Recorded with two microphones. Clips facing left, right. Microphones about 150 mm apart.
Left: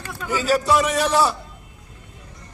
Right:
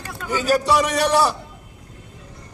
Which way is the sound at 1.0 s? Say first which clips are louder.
Right 1 dB; 10° right (ahead or behind).